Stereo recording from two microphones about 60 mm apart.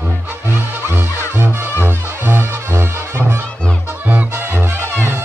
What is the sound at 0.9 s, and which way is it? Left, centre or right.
Music, right.